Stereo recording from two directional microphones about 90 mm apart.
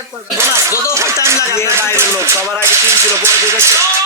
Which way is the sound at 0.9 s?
35° right (ahead or behind).